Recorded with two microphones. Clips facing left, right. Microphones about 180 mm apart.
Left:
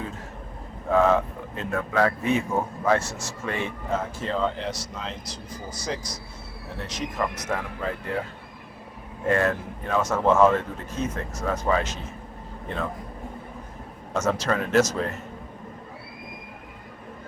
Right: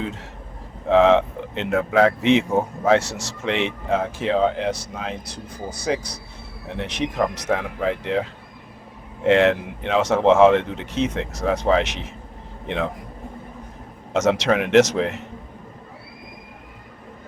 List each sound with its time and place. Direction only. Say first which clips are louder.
0.9 s a man's voice: right 5 dB; 75° right (ahead or behind)
14.1 s speech: right 6 dB; 80° right